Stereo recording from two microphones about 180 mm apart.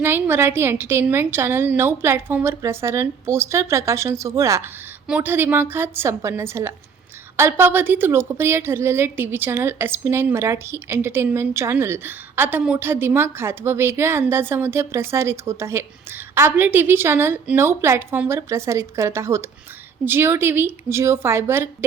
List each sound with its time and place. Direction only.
0.0 s a woman's voice: 10° right (ahead or behind)